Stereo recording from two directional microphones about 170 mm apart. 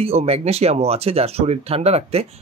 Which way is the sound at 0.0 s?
35° right (ahead or behind).